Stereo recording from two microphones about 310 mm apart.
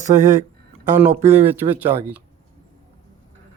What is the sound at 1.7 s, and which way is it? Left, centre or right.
Speech, centre.